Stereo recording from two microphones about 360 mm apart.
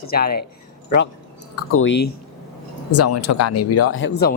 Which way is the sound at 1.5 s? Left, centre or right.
Left.